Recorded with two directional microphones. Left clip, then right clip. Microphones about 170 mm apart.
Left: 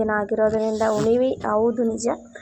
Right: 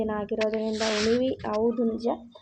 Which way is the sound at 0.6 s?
5° right (ahead or behind).